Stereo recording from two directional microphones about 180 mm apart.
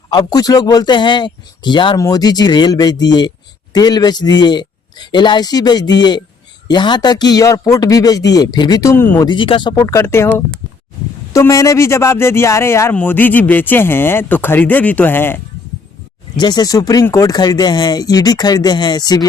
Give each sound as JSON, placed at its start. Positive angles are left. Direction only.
{"t": 0.1, "sound": "a man's voice", "side_deg": 20}
{"t": 9.3, "sound": "speech", "side_deg": 25}
{"t": 16.4, "sound": "a man's voice", "side_deg": 25}